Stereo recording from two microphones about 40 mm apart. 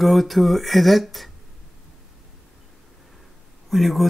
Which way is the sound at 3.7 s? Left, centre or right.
Centre.